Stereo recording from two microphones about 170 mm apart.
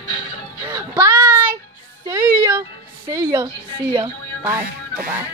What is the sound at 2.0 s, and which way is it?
Speech, 20° right (ahead or behind).